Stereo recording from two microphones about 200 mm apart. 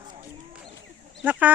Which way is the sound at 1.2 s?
10° right (ahead or behind).